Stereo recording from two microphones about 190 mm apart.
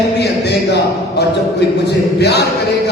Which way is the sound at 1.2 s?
60° left (ahead or behind).